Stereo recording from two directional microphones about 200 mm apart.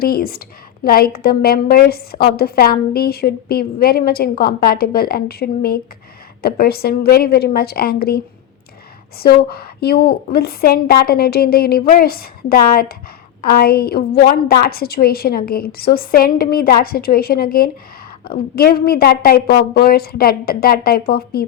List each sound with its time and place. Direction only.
0.0 s a woman's voice: 50° left (ahead or behind)